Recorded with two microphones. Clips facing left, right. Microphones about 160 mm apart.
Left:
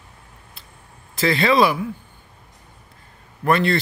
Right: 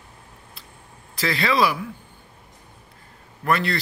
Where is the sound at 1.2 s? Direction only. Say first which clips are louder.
Left 4 dB; 25° left (ahead or behind).